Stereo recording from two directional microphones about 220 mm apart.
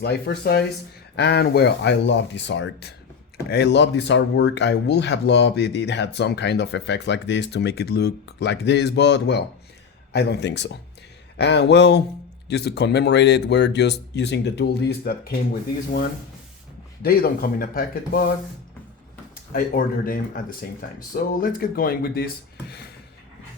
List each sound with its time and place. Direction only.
0.0 s speech: 50° left (ahead or behind)
17.0 s speech: 45° left (ahead or behind)
19.5 s speech: 40° left (ahead or behind)